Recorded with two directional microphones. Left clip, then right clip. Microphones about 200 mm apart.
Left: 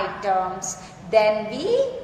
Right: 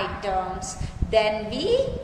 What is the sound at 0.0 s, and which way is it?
A woman's voice, 10° right (ahead or behind).